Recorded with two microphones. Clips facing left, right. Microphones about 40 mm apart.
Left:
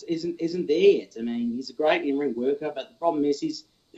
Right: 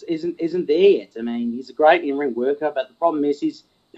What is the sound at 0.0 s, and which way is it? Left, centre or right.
Speech, right.